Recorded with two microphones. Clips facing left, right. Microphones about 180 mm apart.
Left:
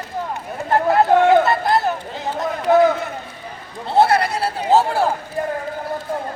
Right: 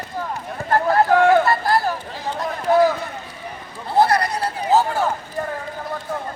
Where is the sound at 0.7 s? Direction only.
20° left (ahead or behind).